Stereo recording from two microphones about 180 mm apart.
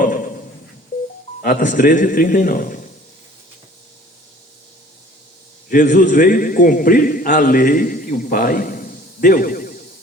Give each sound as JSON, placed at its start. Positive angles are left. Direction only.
{"t": 0.0, "sound": "a sound", "side_deg": 50}
{"t": 1.4, "sound": "speech", "side_deg": 50}
{"t": 5.6, "sound": "a man's voice", "side_deg": 50}